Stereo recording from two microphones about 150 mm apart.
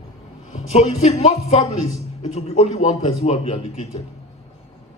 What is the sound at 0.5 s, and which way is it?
Speech, 50° left (ahead or behind).